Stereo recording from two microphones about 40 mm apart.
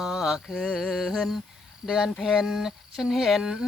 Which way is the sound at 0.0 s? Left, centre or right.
Centre.